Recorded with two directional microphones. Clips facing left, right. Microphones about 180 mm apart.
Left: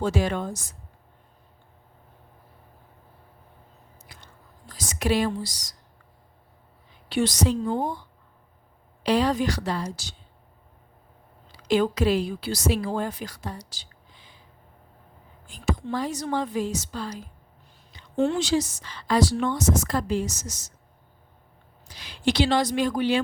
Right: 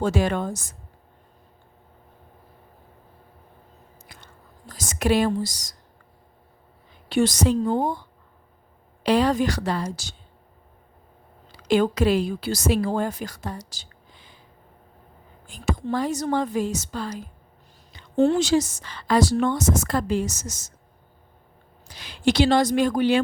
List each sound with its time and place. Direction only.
0.0 s a woman's voice: 55° right (ahead or behind)
4.1 s biting: 55° right (ahead or behind)
4.7 s a woman's voice: 50° right (ahead or behind)
7.1 s a woman's voice: 45° right (ahead or behind)
9.0 s a woman's voice: 55° right (ahead or behind)
11.5 s a woman's voice: 50° right (ahead or behind)
15.4 s a woman's voice: 55° right (ahead or behind)
18.2 s a woman's voice: 40° right (ahead or behind)
21.8 s a woman's voice: 50° right (ahead or behind)